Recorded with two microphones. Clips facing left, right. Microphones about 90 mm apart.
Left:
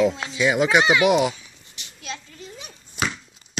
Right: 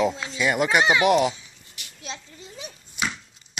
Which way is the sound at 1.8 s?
25° left (ahead or behind).